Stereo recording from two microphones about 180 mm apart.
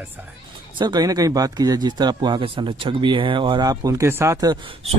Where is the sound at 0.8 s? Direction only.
20° right (ahead or behind).